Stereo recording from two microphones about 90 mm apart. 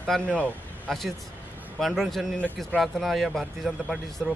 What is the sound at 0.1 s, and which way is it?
Speech, 10° left (ahead or behind).